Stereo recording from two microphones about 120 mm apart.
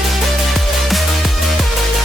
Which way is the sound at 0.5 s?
Centre (ahead or behind).